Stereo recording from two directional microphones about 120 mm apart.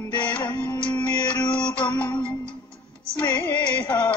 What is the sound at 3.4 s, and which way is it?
Music, 15° left (ahead or behind).